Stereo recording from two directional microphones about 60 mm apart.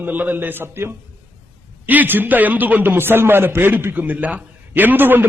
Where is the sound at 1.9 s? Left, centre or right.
Right.